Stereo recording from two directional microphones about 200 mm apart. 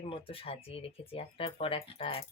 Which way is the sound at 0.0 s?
30° left (ahead or behind).